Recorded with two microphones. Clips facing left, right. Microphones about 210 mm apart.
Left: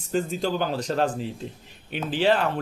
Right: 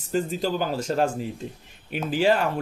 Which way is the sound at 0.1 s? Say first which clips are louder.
Even; 5° right (ahead or behind).